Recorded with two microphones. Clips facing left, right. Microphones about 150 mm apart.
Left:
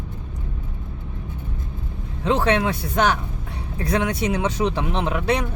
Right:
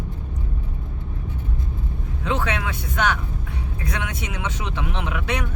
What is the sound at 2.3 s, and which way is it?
Speech, 35° left (ahead or behind).